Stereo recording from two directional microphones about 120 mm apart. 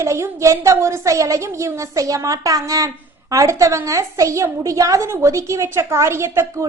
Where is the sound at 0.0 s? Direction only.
25° right (ahead or behind).